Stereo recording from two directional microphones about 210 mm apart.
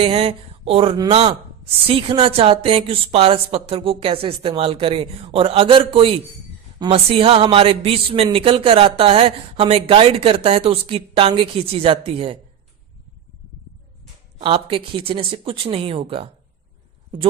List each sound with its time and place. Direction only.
0.0 s speech: 25° right (ahead or behind)
14.3 s speech: 25° right (ahead or behind)